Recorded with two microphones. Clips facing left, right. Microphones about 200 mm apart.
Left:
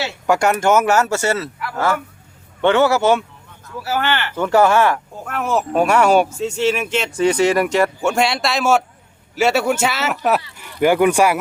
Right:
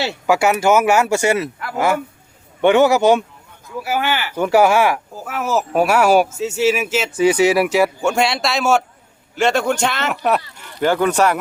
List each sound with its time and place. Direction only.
0.3 s speech: 5° right (ahead or behind); by 11.3 s 10° left (ahead or behind)